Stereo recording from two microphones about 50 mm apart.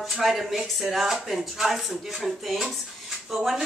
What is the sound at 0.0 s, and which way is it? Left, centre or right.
Speech, centre.